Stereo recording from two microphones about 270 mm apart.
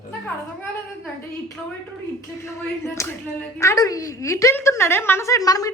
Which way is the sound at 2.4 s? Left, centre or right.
Centre.